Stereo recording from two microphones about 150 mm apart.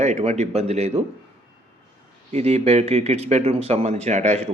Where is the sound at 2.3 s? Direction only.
45° right (ahead or behind).